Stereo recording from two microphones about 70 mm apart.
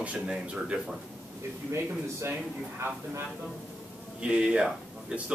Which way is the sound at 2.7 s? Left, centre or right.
Right.